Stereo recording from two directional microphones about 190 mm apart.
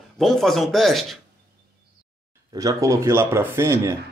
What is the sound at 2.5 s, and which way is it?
Speech, 15° right (ahead or behind).